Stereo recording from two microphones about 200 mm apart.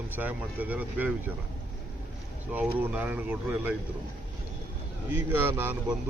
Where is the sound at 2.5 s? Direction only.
10° right (ahead or behind).